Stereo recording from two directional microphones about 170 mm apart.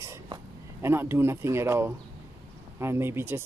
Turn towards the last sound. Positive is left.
turn(degrees=-15)  # may be behind; listen again after turning